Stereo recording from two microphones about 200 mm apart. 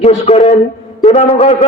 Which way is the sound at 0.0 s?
35° left (ahead or behind).